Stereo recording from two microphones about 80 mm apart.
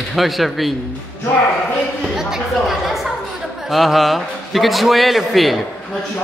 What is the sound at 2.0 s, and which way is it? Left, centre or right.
A man's voice, centre.